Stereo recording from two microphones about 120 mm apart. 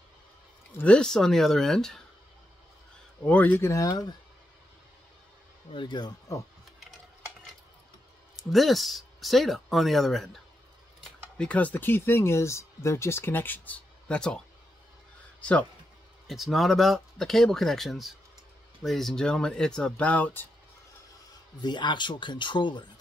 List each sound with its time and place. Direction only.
0.7 s speech: 10° left (ahead or behind)
3.3 s speech: 15° left (ahead or behind); by 4.1 s 30° left (ahead or behind)
5.7 s speech: 40° left (ahead or behind)
8.5 s speech: centre (ahead or behind)
16.3 s speech: centre (ahead or behind)
21.5 s speech: 40° left (ahead or behind)